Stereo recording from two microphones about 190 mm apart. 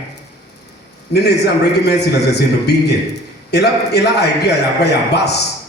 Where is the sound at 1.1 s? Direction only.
60° left (ahead or behind).